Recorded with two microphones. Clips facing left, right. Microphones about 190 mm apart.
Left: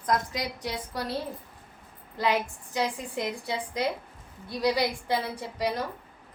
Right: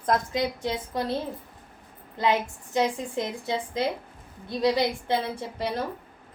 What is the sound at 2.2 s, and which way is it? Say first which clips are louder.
A woman's voice: right 2 dB; 25° right (ahead or behind).